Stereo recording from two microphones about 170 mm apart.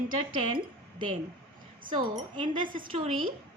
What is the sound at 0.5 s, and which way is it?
A woman's voice, 30° right (ahead or behind).